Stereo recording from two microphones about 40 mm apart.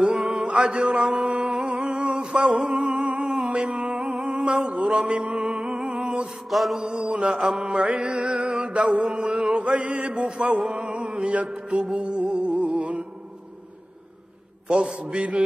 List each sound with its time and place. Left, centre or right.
0.0 s mantra: right
1.3 s music: centre
4.2 s a sound: right
4.6 s mantra: right
5.3 s music: centre
6.5 s mantra: centre
6.9 s mantra: right
8.5 s music: right
9.0 s mantra: right
9.5 s chant: right
10.1 s music: right
14.7 s a man's voice: centre
15.0 s music: right